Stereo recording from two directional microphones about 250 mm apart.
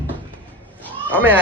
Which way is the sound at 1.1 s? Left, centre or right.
Centre.